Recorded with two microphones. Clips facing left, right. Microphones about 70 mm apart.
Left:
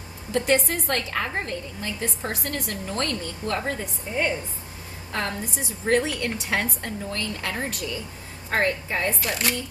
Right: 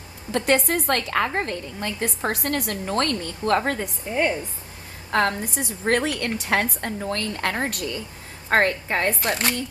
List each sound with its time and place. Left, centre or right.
0.3 s a woman's voice: right
5.1 s a woman's voice: right
9.4 s a woman's voice: right